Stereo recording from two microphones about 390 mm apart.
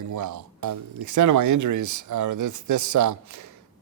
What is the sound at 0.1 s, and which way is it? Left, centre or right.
Speech, right.